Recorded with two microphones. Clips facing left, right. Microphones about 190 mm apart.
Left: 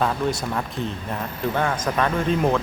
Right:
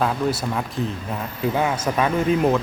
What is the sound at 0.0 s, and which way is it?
A man's voice, 5° right (ahead or behind).